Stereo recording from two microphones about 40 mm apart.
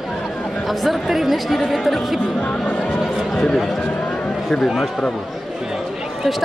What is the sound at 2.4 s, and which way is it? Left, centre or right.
Speech, left.